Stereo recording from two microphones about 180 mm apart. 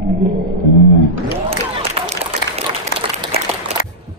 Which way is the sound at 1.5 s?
30° right (ahead or behind).